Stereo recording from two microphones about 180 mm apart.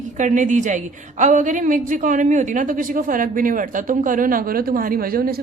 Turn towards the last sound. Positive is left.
turn(degrees=-55)  # may be behind; listen again after turning